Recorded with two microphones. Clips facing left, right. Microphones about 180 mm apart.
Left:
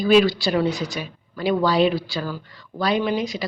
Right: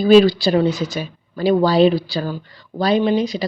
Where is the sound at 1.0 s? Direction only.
35° right (ahead or behind).